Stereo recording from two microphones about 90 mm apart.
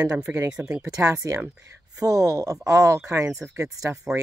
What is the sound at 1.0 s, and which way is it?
Speech, 40° right (ahead or behind).